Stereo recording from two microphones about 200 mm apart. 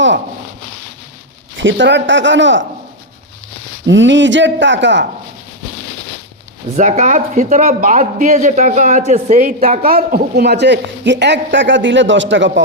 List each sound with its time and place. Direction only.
1.5 s speech: 65° right (ahead or behind)
3.8 s speech: 65° right (ahead or behind)
6.7 s speech: 40° right (ahead or behind); by 12.5 s 65° right (ahead or behind)